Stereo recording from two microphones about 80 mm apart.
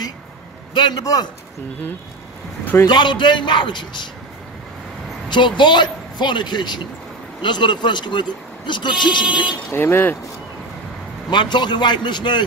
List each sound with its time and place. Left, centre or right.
0.7 s speech: left
1.0 s a man's voice: left
2.9 s speech: left
5.3 s speech: left
9.7 s speech: left
11.2 s speech: left